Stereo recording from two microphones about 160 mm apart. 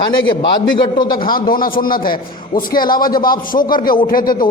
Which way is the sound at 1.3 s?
65° left (ahead or behind).